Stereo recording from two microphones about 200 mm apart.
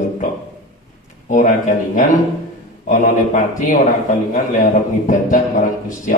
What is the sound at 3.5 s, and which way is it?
A man's voice, 40° left (ahead or behind).